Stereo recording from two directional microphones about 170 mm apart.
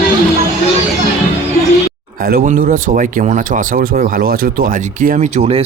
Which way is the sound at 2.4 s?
50° right (ahead or behind).